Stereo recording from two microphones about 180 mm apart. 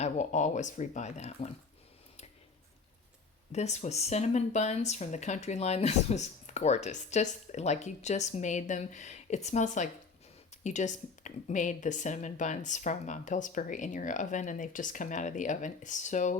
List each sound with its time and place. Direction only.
0.0 s speech: 40° left (ahead or behind)
3.5 s a woman's voice: 40° left (ahead or behind)